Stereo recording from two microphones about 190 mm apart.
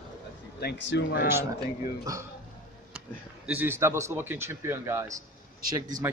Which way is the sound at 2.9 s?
5° right (ahead or behind).